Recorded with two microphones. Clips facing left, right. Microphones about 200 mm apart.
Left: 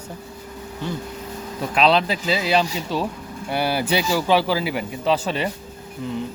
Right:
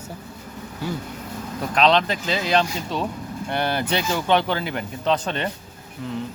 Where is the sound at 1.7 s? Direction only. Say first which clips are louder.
Even; 5° left (ahead or behind).